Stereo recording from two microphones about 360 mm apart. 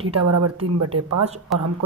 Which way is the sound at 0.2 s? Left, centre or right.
Right.